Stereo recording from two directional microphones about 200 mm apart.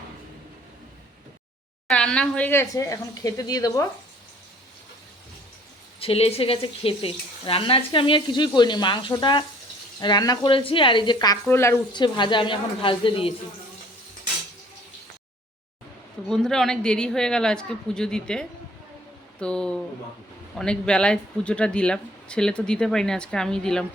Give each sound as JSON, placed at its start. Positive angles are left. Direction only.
{"t": 1.9, "sound": "speech", "side_deg": 5}
{"t": 6.0, "sound": "speech", "side_deg": 30}
{"t": 16.3, "sound": "speech", "side_deg": 5}